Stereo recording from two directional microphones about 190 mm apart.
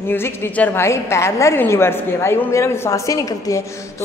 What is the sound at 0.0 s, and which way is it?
A woman's voice, 10° left (ahead or behind).